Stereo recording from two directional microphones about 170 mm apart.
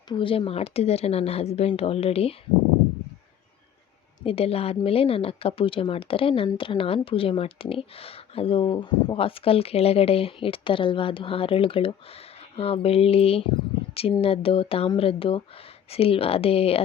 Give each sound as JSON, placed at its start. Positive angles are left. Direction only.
{"t": 0.1, "sound": "speech", "side_deg": 30}
{"t": 4.2, "sound": "speech", "side_deg": 35}